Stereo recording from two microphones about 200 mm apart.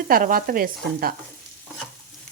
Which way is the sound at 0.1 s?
45° right (ahead or behind).